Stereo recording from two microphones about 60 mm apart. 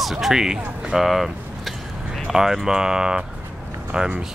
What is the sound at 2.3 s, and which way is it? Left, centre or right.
Speech, centre.